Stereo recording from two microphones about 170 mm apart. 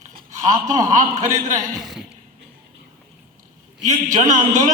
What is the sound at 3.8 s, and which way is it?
Speech, 45° right (ahead or behind).